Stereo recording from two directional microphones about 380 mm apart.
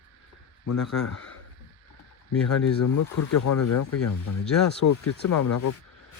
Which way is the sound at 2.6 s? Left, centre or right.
Left.